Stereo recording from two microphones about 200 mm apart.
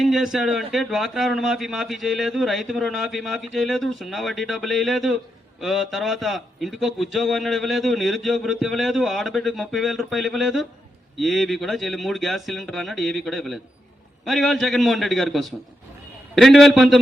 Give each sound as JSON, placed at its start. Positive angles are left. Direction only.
{"t": 0.0, "sound": "a man's voice", "side_deg": 0}